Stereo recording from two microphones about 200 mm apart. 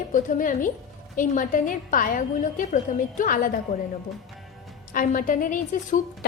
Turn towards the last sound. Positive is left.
turn(degrees=40)  # may be behind; listen again after turning